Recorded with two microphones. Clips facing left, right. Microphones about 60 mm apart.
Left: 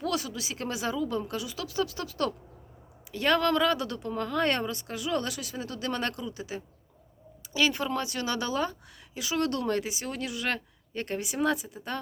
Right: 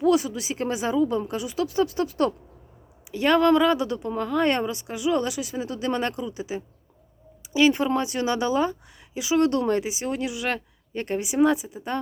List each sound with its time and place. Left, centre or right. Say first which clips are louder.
0.0 s speech: right 10 dB; right